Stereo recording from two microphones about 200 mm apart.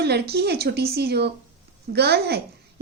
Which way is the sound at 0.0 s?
55° right (ahead or behind).